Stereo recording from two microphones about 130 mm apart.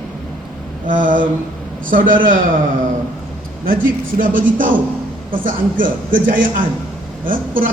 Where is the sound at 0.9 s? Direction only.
90° right.